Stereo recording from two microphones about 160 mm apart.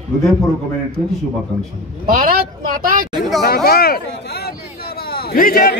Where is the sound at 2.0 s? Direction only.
65° right (ahead or behind).